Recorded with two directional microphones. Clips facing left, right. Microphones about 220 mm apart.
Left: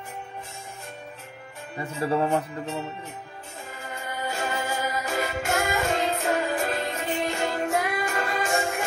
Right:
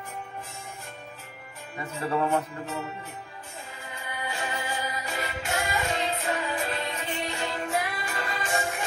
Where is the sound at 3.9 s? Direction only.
45° left (ahead or behind).